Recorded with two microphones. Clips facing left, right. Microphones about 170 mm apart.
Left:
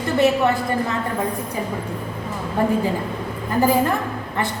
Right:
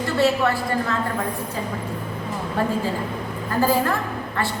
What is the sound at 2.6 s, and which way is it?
A woman's voice, 15° left (ahead or behind).